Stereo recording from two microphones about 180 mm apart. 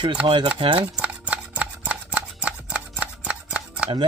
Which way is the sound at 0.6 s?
30° right (ahead or behind).